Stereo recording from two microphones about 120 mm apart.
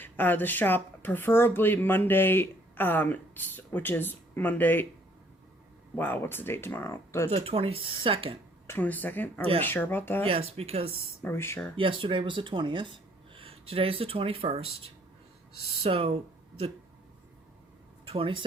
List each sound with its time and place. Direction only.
0.0 s speech: 15° left (ahead or behind)
6.0 s speech: 15° left (ahead or behind)
7.3 s speech: 60° right (ahead or behind)
8.6 s speech: 15° left (ahead or behind)
10.2 s speech: 55° right (ahead or behind)
11.2 s speech: 20° left (ahead or behind)
11.8 s speech: 45° right (ahead or behind)
15.8 s speech: 50° right (ahead or behind)
18.0 s speech: 50° right (ahead or behind)